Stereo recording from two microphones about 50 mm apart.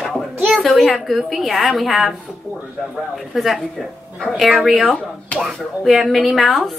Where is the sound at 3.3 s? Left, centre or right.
Centre.